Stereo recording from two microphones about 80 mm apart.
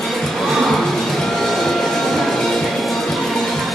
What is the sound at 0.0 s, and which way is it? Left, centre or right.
Music, centre.